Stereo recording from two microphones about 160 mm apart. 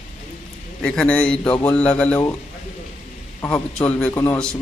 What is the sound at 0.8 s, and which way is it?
Speech, 5° left (ahead or behind).